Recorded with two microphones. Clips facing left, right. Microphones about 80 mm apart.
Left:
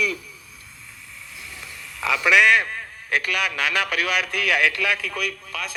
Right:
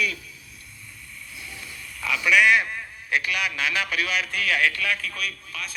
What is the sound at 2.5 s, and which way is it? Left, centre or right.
A man's voice, left.